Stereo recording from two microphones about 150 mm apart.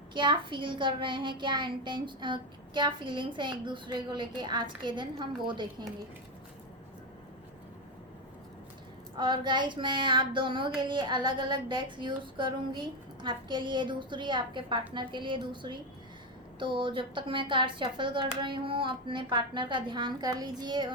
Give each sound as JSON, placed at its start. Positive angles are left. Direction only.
{"t": 0.1, "sound": "child singing", "side_deg": -30}
{"t": 9.1, "sound": "child singing", "side_deg": -30}